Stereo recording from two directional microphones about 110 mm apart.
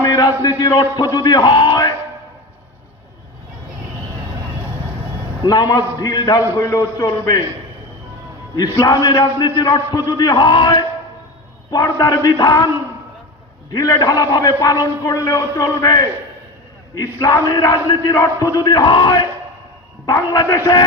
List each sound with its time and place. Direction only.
0.0 s a sound: 35° left (ahead or behind)
0.6 s a man's voice: 35° left (ahead or behind)
5.5 s a man's voice: 35° left (ahead or behind)
8.5 s a man's voice: 35° left (ahead or behind)
13.7 s a man's voice: 30° left (ahead or behind)